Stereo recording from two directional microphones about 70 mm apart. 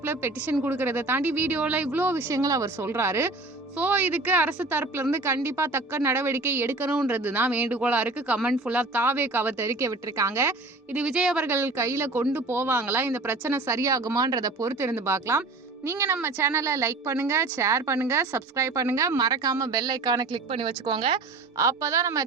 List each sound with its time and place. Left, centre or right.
0.0 s a woman's voice: right
2.3 s a woman's voice: right
2.8 s a woman's voice: right
3.8 s a woman's voice: right
9.6 s a woman's voice: right
10.9 s speech: centre
11.4 s a woman's voice: right
13.7 s speech: right
14.6 s a woman's voice: right
19.2 s speech: right
21.6 s a woman's voice: right